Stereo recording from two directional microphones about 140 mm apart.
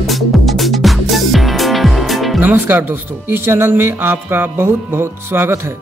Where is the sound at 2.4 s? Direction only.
15° right (ahead or behind).